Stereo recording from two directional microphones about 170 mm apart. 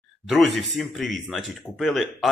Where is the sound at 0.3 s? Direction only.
Centre (ahead or behind).